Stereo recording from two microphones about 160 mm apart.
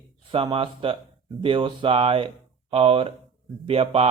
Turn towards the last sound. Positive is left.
turn(degrees=-35)  # may be behind; listen again after turning